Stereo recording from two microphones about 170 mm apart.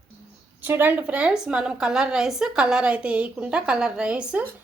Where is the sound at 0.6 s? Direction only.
10° right (ahead or behind).